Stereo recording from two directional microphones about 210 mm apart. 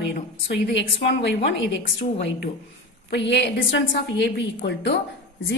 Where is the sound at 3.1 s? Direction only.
55° left (ahead or behind).